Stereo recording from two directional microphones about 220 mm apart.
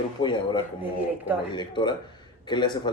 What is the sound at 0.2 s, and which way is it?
Speech, 20° left (ahead or behind).